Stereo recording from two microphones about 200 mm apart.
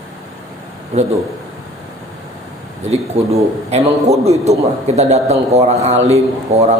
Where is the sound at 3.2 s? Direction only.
30° right (ahead or behind).